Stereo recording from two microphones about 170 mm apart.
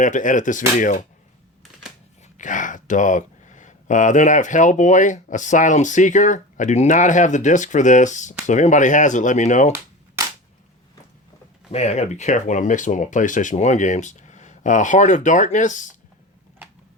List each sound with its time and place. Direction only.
0.0 s speech: 50° left (ahead or behind)
2.2 s speech: 50° left (ahead or behind)
11.7 s speech: 40° left (ahead or behind)